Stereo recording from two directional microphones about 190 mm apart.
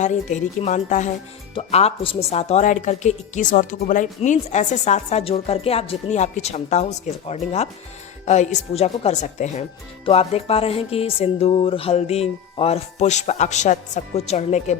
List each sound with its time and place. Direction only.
0.0 s a woman's voice: 40° left (ahead or behind)